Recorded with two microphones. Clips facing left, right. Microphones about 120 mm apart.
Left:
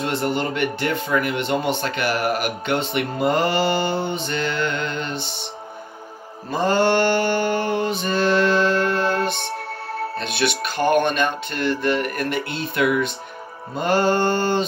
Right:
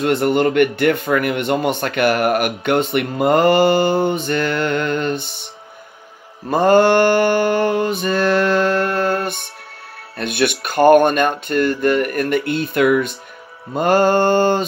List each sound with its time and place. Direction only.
0.0 s speech: 55° right (ahead or behind)
6.5 s speech: 55° right (ahead or behind)